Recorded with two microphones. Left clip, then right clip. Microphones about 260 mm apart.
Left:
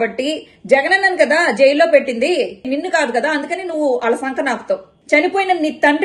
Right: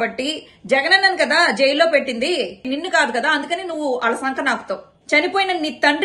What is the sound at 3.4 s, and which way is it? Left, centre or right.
A woman's voice, centre.